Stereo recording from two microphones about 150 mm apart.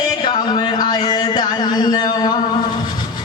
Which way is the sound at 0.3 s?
30° left (ahead or behind).